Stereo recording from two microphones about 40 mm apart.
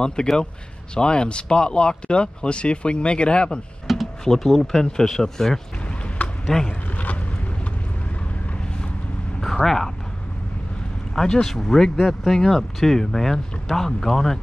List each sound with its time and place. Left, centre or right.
0.0 s speech: left
3.8 s a sound: centre
4.2 s speech: centre
9.4 s vehicle: centre
11.4 s speech: centre